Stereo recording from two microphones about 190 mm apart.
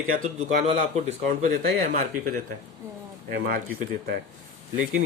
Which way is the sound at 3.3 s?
55° right (ahead or behind).